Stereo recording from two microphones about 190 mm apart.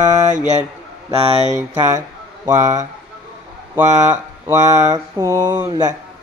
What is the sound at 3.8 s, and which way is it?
Mantra, 40° right (ahead or behind).